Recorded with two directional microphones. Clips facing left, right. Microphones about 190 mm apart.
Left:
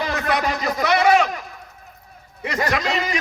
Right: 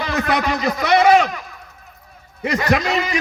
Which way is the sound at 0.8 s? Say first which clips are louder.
Right 3 dB; 25° right (ahead or behind).